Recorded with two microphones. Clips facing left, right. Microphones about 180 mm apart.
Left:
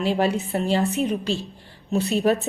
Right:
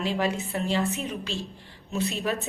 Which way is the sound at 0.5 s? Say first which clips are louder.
Left 5 dB; 40° left (ahead or behind).